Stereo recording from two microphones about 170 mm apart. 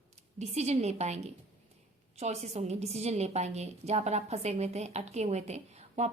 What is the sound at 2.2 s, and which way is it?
A woman's voice, 40° right (ahead or behind).